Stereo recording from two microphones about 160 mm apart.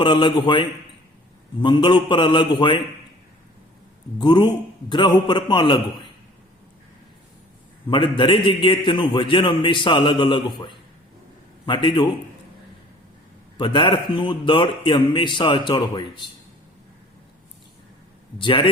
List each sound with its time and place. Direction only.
0.0 s a man's voice: 30° left (ahead or behind)
4.2 s a man's voice: 30° left (ahead or behind)
7.9 s a man's voice: 30° left (ahead or behind)
13.6 s a man's voice: 30° left (ahead or behind)
18.3 s a man's voice: 30° left (ahead or behind)